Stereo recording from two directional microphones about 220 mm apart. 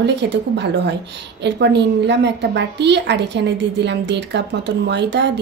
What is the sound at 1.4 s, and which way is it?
A woman's voice, 50° right (ahead or behind).